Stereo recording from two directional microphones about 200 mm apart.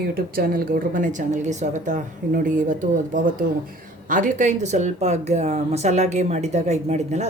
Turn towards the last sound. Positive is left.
turn(degrees=-35)  # may be behind; listen again after turning